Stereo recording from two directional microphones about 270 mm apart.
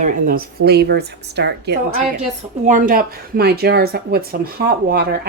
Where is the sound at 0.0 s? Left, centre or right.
Right.